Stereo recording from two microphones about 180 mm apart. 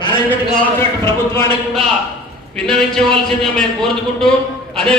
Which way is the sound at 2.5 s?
5° left (ahead or behind).